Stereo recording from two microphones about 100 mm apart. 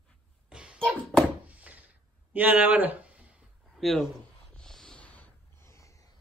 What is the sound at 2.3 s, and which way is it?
Speech, 15° right (ahead or behind).